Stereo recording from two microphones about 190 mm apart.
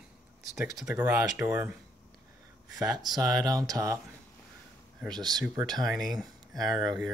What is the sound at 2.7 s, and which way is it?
Speech, 20° right (ahead or behind).